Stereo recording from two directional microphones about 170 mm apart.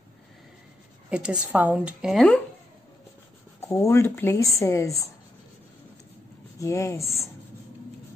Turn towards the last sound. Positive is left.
turn(degrees=20)  # may be behind; listen again after turning